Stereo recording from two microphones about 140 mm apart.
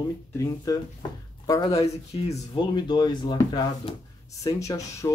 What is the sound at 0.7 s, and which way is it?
Speech, 25° left (ahead or behind).